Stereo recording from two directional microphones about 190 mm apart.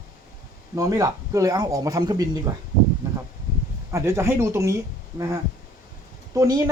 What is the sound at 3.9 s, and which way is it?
Speech, 15° right (ahead or behind).